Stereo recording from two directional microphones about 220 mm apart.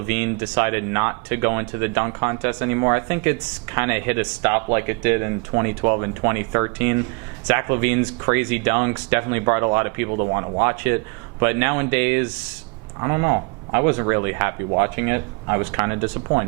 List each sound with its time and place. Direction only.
0.1 s speech: 10° right (ahead or behind)
10.1 s speech: 30° right (ahead or behind)